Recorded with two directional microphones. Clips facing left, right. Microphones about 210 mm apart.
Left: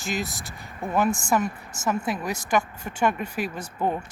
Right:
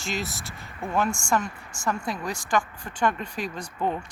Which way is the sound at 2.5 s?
15° left (ahead or behind).